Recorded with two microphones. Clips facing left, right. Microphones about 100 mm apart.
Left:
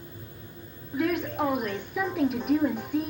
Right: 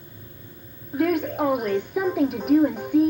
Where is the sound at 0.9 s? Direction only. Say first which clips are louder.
Right 5 dB; 50° right (ahead or behind).